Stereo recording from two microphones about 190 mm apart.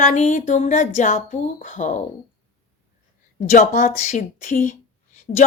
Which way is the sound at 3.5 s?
45° left (ahead or behind).